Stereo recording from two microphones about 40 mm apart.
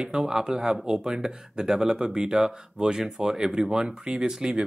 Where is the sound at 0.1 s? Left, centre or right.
Centre.